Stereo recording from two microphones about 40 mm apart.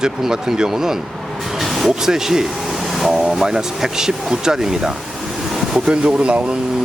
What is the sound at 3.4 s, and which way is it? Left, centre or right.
Speech, centre.